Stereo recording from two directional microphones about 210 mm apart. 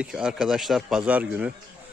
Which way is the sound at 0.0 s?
5° right (ahead or behind).